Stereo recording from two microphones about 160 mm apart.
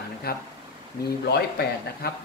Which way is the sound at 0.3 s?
75° left (ahead or behind).